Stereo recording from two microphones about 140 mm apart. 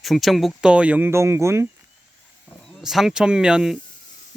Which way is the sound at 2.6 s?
Centre (ahead or behind).